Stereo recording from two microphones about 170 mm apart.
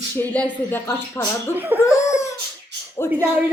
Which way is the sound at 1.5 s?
10° right (ahead or behind).